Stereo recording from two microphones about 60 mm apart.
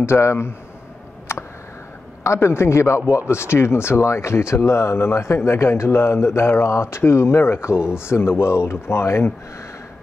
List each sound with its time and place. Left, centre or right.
0.0 s speech: left
2.2 s speech: left